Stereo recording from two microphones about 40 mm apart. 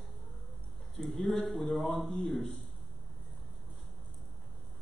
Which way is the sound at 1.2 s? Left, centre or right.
Centre.